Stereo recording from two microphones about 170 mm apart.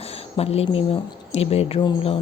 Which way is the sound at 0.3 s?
35° left (ahead or behind).